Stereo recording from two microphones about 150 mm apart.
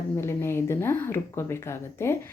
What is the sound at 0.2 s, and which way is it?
A woman's voice, 15° left (ahead or behind).